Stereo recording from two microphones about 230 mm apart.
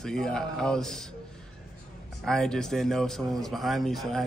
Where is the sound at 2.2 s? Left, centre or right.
Centre.